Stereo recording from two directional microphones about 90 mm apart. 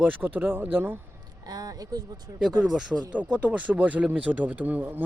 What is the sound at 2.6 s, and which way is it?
Speech, 5° right (ahead or behind).